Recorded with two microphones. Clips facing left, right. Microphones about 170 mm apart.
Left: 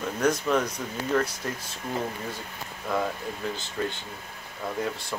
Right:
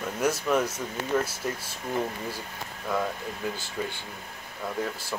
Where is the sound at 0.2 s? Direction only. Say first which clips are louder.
Left 1 dB; 5° right (ahead or behind).